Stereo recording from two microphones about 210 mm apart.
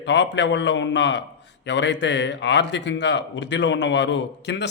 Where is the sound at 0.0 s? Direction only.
55° left (ahead or behind).